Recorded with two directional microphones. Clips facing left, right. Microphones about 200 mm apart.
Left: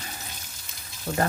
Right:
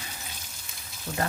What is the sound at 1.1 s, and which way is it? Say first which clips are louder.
Speech: left 5 dB; 65° left (ahead or behind).